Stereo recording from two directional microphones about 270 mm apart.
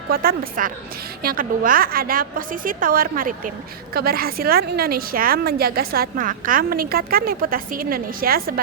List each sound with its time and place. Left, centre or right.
0.1 s a woman's voice: right